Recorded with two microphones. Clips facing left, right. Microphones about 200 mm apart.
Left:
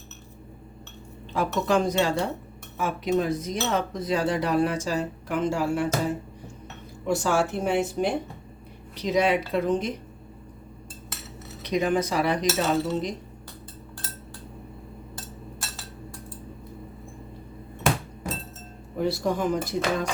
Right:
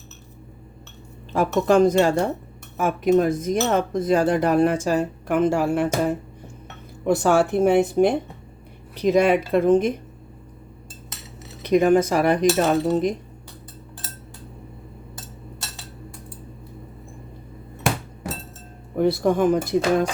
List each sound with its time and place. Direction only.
1.3 s cutlery: 50° right (ahead or behind)
7.0 s speech: 60° right (ahead or behind)
9.0 s cutlery: 50° right (ahead or behind)
11.6 s cutlery: 50° right (ahead or behind)
18.9 s speech: 55° right (ahead or behind)